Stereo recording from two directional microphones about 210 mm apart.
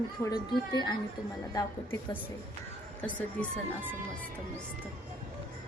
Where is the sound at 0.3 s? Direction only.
20° left (ahead or behind).